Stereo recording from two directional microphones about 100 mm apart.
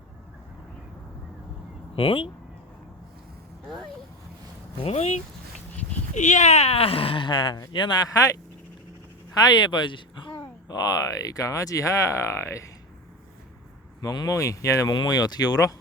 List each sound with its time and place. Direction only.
2.0 s speech: 60° left (ahead or behind)
4.8 s speech: 90° left
6.6 s speech: 85° left; by 10.3 s 55° left (ahead or behind)
10.7 s speech: 40° left (ahead or behind)
14.0 s speech: 35° left (ahead or behind)